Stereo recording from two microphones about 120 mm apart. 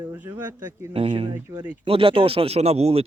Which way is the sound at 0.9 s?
50° right (ahead or behind).